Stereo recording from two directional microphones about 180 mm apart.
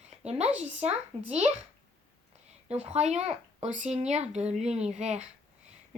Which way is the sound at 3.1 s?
35° right (ahead or behind).